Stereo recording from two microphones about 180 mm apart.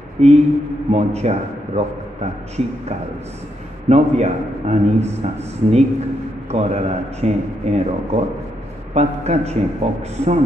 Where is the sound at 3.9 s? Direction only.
40° right (ahead or behind).